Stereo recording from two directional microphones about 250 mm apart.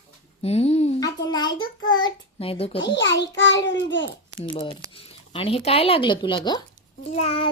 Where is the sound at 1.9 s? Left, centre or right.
Centre.